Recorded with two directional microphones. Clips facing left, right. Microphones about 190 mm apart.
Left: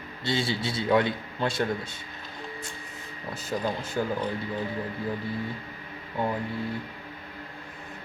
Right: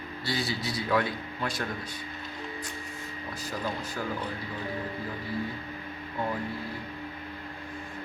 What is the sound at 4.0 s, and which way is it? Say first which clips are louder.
Speech: left 8 dB; 30° left (ahead or behind).